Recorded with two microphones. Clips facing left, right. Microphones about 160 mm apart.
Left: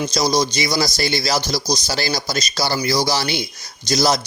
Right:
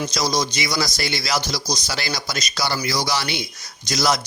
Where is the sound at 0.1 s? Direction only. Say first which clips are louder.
Left 4 dB; 35° left (ahead or behind).